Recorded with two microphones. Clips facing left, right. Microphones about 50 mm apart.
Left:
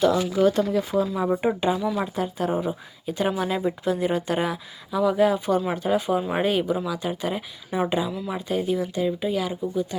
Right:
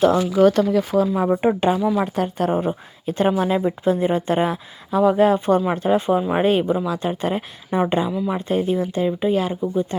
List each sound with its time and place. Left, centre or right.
0.0 s speech: right
0.3 s speech: right
1.5 s speech: right
2.0 s speech: right